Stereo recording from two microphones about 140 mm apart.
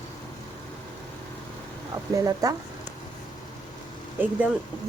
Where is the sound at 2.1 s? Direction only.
25° right (ahead or behind).